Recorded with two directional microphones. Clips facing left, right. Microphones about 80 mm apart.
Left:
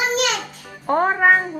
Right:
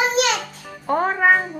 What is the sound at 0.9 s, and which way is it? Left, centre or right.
Speech, centre.